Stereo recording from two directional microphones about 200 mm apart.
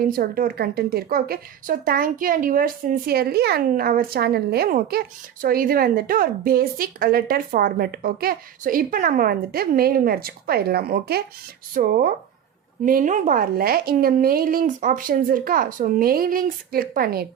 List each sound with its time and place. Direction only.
0.0 s a woman's voice: 45° right (ahead or behind)